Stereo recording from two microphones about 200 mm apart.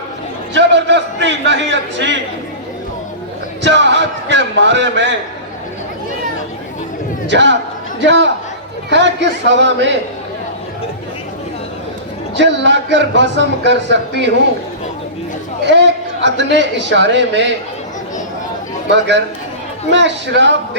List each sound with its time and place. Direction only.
0.5 s a man's voice: 60° right (ahead or behind)
3.6 s a man's voice: 65° right (ahead or behind)
7.3 s a man's voice: 65° right (ahead or behind)
12.4 s speech: 65° right (ahead or behind)
15.6 s a man's voice: 60° right (ahead or behind)
19.9 s speech: 60° right (ahead or behind)